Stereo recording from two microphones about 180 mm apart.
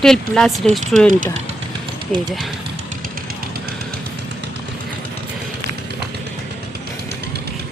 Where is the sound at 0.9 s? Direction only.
45° right (ahead or behind).